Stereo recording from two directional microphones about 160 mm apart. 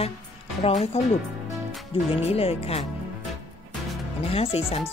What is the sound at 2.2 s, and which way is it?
Speech, 40° left (ahead or behind).